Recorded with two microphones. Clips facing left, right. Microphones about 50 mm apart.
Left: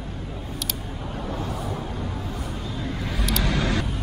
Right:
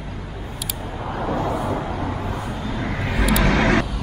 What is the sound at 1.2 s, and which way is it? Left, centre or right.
Vehicle, right.